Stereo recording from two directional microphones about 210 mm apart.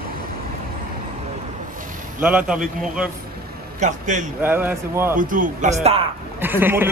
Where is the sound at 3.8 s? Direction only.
35° right (ahead or behind).